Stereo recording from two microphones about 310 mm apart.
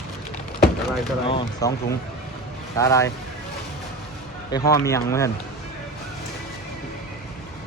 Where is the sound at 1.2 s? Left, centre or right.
Centre.